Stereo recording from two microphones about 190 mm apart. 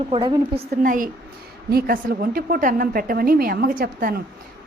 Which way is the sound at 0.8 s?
45° right (ahead or behind).